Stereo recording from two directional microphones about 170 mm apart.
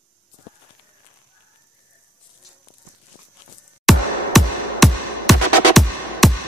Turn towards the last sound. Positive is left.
turn(degrees=0)  # may be behind; listen again after turning